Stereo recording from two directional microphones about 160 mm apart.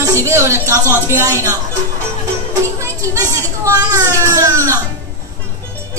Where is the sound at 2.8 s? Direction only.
20° right (ahead or behind).